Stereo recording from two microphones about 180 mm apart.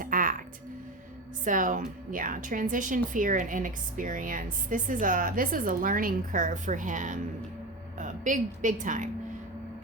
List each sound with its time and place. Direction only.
0.0 s music: 50° right (ahead or behind)
1.5 s a woman's voice: 45° right (ahead or behind)